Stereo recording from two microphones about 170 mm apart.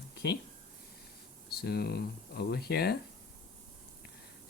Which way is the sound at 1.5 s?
70° left (ahead or behind).